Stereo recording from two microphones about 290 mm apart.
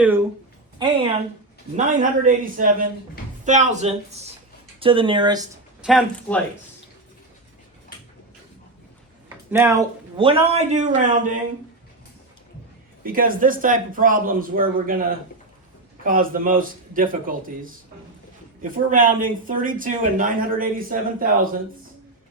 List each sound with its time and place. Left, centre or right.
0.8 s speech: centre
5.8 s speech: centre
9.5 s speech: centre; by 11.3 s right
13.0 s speech: right
16.0 s speech: right